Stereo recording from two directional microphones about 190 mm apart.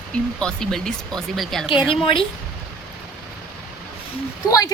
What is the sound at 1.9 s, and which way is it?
Speech, 30° left (ahead or behind).